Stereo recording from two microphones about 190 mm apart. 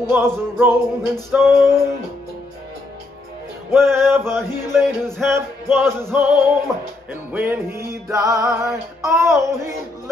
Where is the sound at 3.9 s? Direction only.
15° right (ahead or behind).